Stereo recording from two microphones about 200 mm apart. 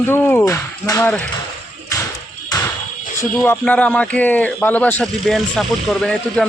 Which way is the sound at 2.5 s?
20° left (ahead or behind).